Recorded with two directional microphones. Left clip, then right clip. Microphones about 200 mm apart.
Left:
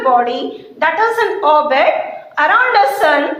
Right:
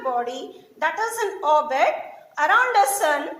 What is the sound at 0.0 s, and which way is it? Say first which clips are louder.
A woman's voice: left 12 dB; 50° right (ahead or behind).